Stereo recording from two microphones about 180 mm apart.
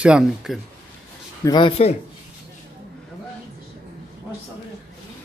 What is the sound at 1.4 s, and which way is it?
Speech, 25° left (ahead or behind).